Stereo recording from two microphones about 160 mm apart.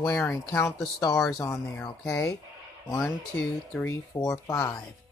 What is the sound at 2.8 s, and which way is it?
Speech, 20° left (ahead or behind).